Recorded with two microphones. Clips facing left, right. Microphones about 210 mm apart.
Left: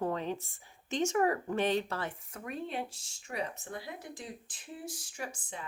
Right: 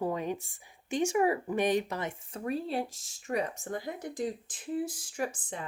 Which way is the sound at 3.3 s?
45° right (ahead or behind).